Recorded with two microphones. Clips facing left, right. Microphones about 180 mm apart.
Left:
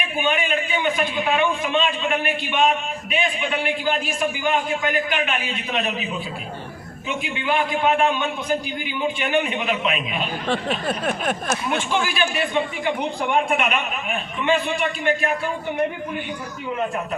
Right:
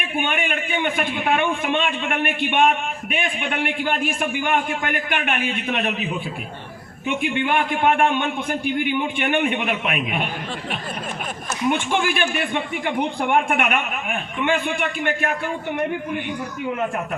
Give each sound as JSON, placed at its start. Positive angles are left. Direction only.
{"t": 0.2, "sound": "a man's voice", "side_deg": -60}
{"t": 7.2, "sound": "a man's voice", "side_deg": -55}
{"t": 10.5, "sound": "a sound", "side_deg": 75}
{"t": 11.9, "sound": "a man's voice", "side_deg": -55}